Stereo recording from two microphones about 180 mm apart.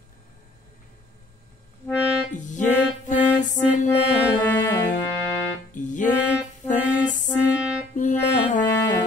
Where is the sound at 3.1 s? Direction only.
45° left (ahead or behind).